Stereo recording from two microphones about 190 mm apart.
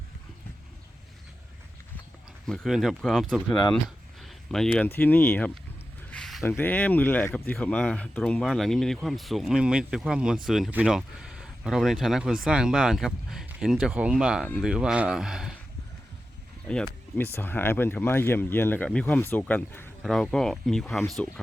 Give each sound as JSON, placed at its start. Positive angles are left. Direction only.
{"t": 2.5, "sound": "speech", "side_deg": 0}
{"t": 3.5, "sound": "speech", "side_deg": 25}
{"t": 3.8, "sound": "speech", "side_deg": 0}
{"t": 6.1, "sound": "a sound", "side_deg": 5}
{"t": 6.6, "sound": "speech", "side_deg": 10}
{"t": 16.6, "sound": "speech", "side_deg": 5}